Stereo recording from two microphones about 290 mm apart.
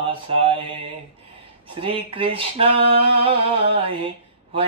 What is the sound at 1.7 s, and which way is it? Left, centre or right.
Speech, centre.